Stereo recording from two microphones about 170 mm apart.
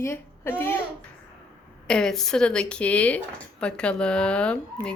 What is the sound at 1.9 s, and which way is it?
Speech, 5° left (ahead or behind).